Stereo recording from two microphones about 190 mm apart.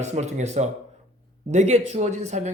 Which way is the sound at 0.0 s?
40° right (ahead or behind).